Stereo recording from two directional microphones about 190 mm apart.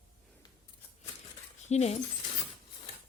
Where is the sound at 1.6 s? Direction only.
35° left (ahead or behind).